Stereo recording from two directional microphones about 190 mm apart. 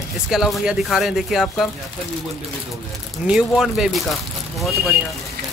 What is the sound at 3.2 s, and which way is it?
Speech, 5° right (ahead or behind).